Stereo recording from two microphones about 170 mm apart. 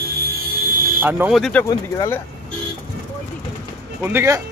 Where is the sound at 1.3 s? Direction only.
5° left (ahead or behind).